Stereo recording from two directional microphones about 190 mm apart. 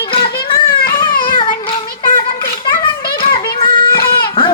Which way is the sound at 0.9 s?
50° left (ahead or behind).